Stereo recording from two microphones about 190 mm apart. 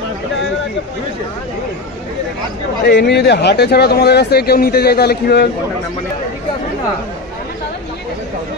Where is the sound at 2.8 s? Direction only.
60° left (ahead or behind).